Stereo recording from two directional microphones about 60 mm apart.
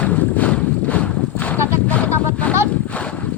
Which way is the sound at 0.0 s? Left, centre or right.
Left.